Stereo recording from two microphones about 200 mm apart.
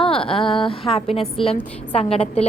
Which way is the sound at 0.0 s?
25° left (ahead or behind).